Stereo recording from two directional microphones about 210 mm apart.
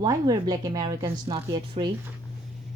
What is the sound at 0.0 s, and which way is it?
A woman's voice, 20° right (ahead or behind).